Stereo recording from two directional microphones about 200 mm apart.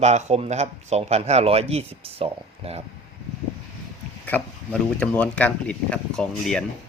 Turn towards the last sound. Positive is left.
turn(degrees=5)  # may be behind; listen again after turning